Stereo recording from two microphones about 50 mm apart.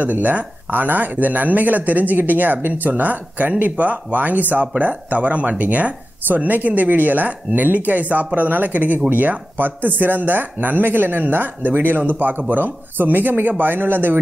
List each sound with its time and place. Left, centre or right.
0.0 s speech: right